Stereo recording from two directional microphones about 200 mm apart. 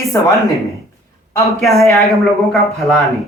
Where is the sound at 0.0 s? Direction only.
15° left (ahead or behind).